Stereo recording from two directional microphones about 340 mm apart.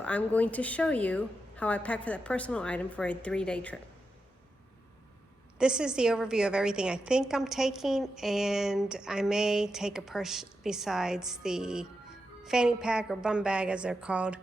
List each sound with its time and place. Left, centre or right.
0.0 s a woman's voice: centre
5.5 s a woman's voice: centre